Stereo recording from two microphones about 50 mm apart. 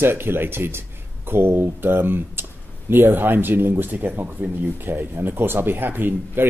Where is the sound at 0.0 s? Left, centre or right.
Right.